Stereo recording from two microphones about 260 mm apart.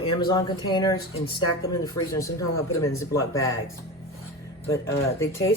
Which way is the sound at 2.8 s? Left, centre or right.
Centre.